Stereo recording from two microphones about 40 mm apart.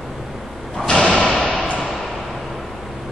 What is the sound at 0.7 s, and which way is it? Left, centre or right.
Thump, left.